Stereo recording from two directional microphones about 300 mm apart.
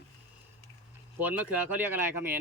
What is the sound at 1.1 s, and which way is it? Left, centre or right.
Speech, centre.